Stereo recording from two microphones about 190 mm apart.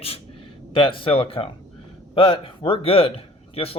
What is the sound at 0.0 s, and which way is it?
Speech, 30° left (ahead or behind).